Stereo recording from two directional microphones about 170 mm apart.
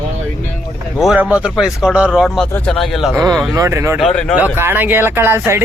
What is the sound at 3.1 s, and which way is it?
Speech, 20° right (ahead or behind).